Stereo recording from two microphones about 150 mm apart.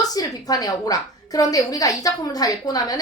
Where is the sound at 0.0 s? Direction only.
25° left (ahead or behind).